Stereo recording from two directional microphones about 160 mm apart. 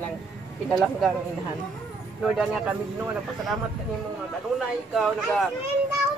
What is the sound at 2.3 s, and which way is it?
Speech, 5° right (ahead or behind).